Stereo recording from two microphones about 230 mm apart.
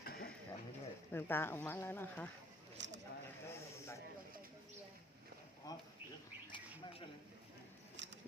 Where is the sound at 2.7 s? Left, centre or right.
Right.